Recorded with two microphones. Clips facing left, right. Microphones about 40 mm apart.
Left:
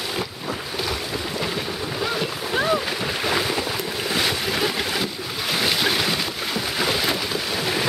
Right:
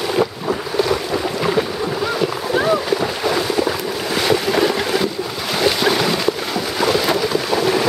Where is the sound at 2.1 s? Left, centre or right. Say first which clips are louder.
Right 6 dB; centre.